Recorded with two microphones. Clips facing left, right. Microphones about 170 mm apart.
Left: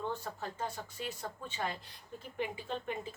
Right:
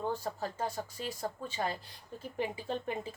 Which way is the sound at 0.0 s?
35° right (ahead or behind).